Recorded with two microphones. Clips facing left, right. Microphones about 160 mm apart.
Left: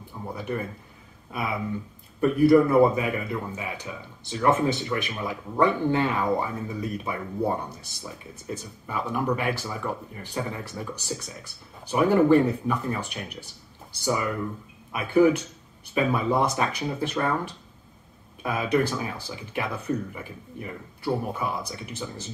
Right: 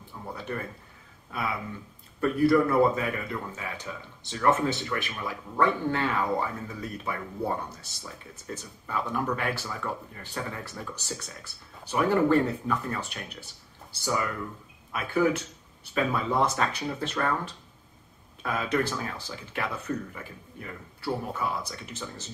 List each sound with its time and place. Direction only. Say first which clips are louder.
0.3 s a man's voice: left 4 dB; 15° left (ahead or behind)
14.9 s a man's voice: left 6 dB; 15° left (ahead or behind)